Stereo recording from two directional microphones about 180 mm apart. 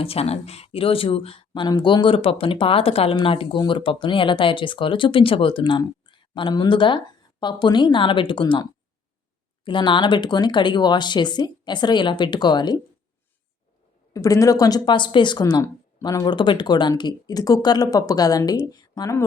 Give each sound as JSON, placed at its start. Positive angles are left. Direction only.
{"t": 0.0, "sound": "speech", "side_deg": 35}
{"t": 9.6, "sound": "speech", "side_deg": 25}
{"t": 14.1, "sound": "speech", "side_deg": 20}